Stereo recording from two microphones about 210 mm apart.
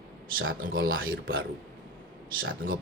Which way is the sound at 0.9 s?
70° right (ahead or behind).